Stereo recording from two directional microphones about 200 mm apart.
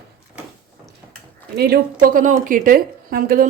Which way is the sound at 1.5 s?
50° right (ahead or behind).